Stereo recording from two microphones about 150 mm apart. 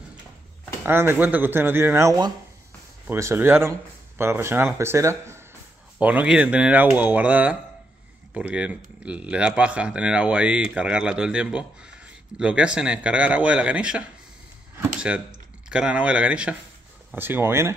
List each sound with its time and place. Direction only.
0.8 s speech: 15° right (ahead or behind)